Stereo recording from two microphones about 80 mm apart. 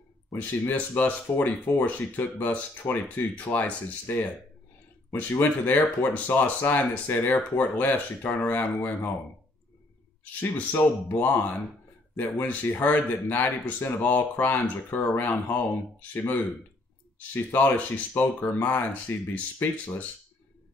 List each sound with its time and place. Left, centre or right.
0.3 s speech: left
5.3 s speech: left
10.4 s speech: left